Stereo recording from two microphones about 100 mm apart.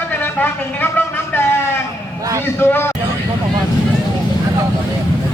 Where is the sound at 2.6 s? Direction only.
25° left (ahead or behind).